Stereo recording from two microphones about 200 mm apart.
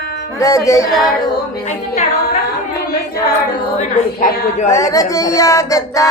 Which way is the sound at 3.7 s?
35° left (ahead or behind).